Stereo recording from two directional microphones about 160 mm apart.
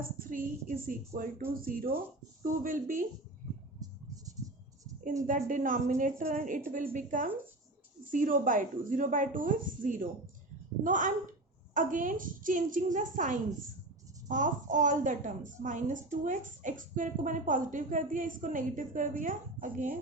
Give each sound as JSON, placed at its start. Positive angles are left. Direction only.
{"t": 0.0, "sound": "a woman's voice", "side_deg": -60}
{"t": 5.2, "sound": "a woman's voice", "side_deg": -55}